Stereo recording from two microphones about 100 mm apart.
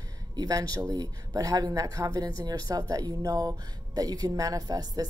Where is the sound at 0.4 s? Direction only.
35° right (ahead or behind).